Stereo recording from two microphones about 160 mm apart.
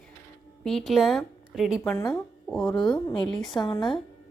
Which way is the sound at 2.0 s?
20° left (ahead or behind).